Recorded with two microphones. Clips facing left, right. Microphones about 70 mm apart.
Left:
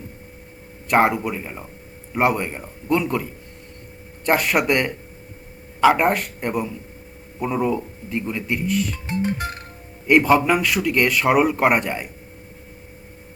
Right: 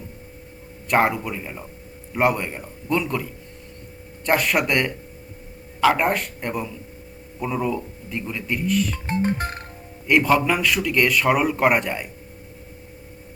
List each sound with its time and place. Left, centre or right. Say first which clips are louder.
0.9 s speech: left 2 dB; centre
9.0 s music: right 1 dB; right
10.2 s speech: left 2 dB; centre